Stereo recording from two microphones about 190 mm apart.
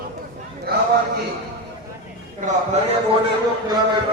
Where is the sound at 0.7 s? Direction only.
55° right (ahead or behind).